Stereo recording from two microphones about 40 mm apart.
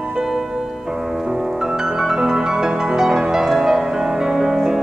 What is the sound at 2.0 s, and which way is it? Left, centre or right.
Music, centre.